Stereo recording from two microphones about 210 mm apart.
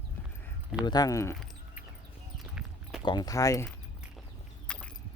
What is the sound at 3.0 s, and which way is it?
Speech, 20° left (ahead or behind).